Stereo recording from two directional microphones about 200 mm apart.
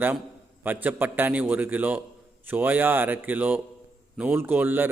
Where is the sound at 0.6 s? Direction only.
10° right (ahead or behind).